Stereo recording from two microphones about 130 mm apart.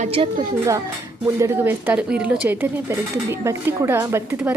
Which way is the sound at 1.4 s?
20° right (ahead or behind).